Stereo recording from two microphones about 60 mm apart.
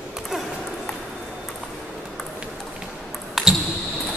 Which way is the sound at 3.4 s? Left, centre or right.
Centre.